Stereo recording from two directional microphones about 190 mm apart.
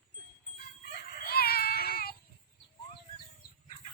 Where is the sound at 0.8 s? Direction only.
55° left (ahead or behind).